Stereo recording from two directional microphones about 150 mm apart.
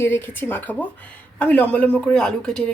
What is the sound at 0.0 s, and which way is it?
Speech, 15° left (ahead or behind).